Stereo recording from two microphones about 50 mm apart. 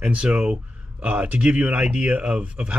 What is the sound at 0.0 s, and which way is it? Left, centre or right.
Speech, right.